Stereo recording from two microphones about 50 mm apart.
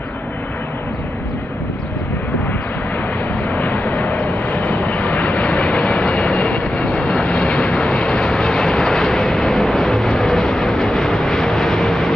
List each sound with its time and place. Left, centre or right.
3.4 s vehicle: left; by 12.1 s centre